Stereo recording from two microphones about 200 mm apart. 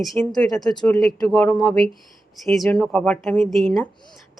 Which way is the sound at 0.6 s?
20° left (ahead or behind).